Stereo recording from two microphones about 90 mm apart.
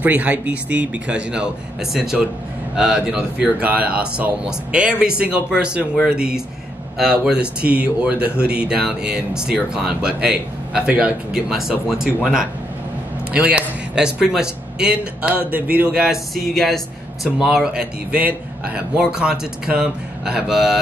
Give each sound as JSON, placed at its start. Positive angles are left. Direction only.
{"t": 0.0, "sound": "speech", "side_deg": -20}
{"t": 16.3, "sound": "speech", "side_deg": 5}